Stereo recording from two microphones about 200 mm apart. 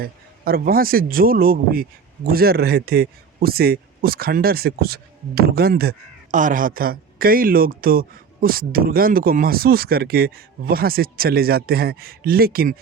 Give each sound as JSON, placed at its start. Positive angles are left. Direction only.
{"t": 0.0, "sound": "speech", "side_deg": -50}